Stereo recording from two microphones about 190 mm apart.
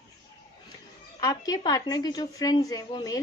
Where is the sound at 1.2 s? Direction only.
20° left (ahead or behind).